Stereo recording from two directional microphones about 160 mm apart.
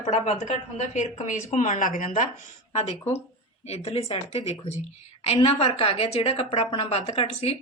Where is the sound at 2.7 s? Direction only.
40° left (ahead or behind).